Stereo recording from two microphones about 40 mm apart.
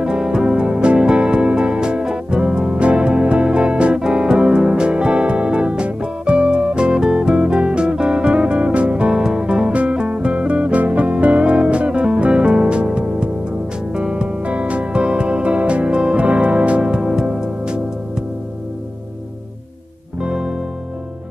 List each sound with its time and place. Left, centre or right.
0.0 s music: right
9.1 s music: centre
14.4 s music: right
16.8 s music: centre
20.2 s music: right